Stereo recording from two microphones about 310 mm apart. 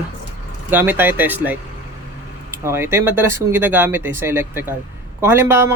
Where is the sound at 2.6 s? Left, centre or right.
Centre.